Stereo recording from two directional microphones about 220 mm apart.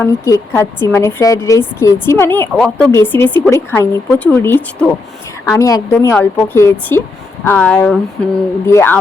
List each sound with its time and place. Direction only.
0.0 s a woman's voice: 15° left (ahead or behind)